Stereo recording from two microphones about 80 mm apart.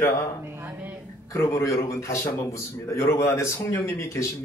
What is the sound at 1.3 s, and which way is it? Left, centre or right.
A man's voice, left.